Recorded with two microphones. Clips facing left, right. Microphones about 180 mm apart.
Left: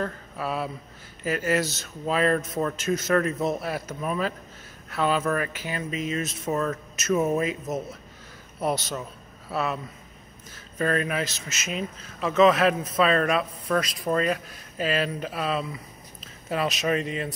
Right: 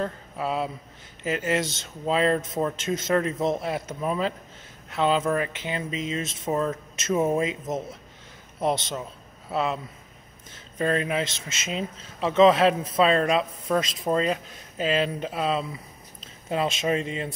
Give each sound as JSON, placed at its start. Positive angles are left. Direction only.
{"t": 0.0, "sound": "a man's voice", "side_deg": -20}
{"t": 10.8, "sound": "a man's voice", "side_deg": -25}